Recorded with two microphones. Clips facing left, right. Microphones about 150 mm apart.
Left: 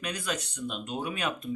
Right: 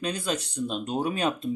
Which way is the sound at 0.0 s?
30° right (ahead or behind).